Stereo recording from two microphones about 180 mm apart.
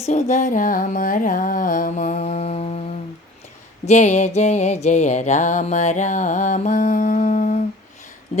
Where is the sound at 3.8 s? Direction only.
40° left (ahead or behind).